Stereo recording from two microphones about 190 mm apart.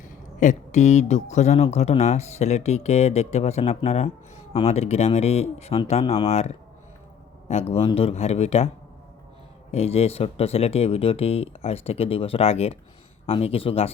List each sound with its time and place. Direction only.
0.0 s speech: 40° left (ahead or behind)
9.7 s speech: 30° left (ahead or behind)